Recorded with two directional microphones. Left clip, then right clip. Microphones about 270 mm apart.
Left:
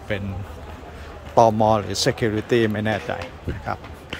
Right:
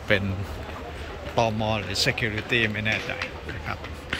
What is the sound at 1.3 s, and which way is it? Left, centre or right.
Speech, left.